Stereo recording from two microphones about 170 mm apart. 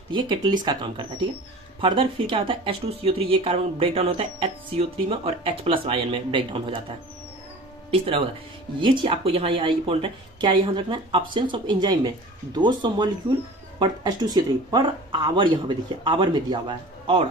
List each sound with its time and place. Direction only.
0.1 s speech: 25° right (ahead or behind)
7.9 s speech: 35° right (ahead or behind)